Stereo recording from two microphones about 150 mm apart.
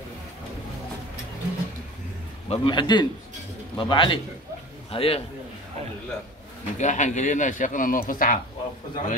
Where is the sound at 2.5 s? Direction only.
35° left (ahead or behind).